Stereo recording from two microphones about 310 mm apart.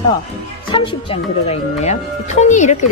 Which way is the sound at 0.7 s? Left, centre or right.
Centre.